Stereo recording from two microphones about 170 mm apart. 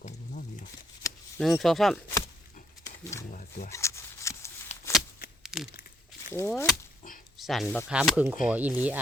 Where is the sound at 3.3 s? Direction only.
50° left (ahead or behind).